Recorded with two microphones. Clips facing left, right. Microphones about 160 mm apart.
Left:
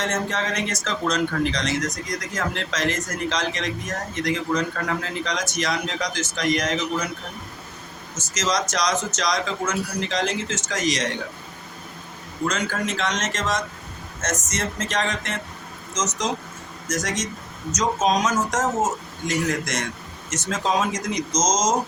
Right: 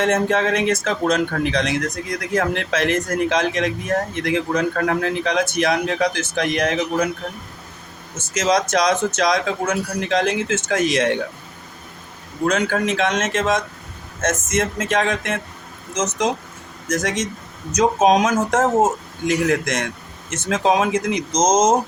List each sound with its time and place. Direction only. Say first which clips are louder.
0.0 s speech: right 8 dB; 55° right (ahead or behind)
8.4 s speech: right 6 dB; 60° right (ahead or behind)
12.5 s a man's voice: right 7 dB; 60° right (ahead or behind)